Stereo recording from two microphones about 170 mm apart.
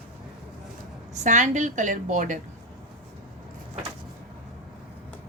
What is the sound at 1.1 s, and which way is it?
A woman's voice, 45° right (ahead or behind).